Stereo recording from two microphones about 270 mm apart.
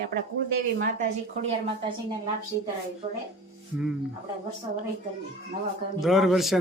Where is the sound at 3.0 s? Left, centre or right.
Centre.